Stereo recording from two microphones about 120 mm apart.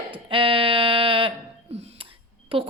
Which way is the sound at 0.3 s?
45° right (ahead or behind).